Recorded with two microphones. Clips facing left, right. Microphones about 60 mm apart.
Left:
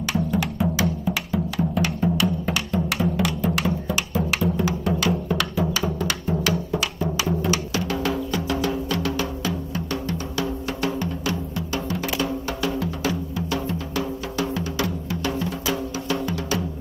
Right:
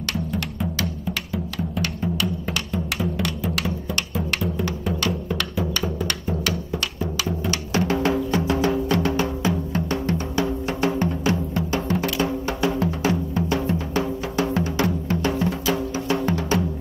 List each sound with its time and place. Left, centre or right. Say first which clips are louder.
0.1 s music: left 4 dB; centre
7.7 s music: right 4 dB; right